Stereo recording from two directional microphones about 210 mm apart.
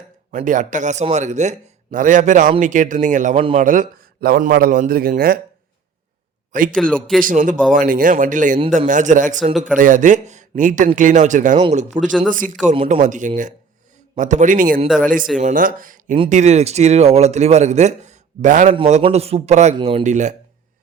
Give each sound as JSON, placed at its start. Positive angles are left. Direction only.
{"t": 0.3, "sound": "a man's voice", "side_deg": -35}
{"t": 6.5, "sound": "a man's voice", "side_deg": -40}
{"t": 6.7, "sound": "a man's voice", "side_deg": 5}
{"t": 7.2, "sound": "a man's voice", "side_deg": -40}
{"t": 14.8, "sound": "a man's voice", "side_deg": 0}
{"t": 15.4, "sound": "a man's voice", "side_deg": -35}
{"t": 16.1, "sound": "a man's voice", "side_deg": -30}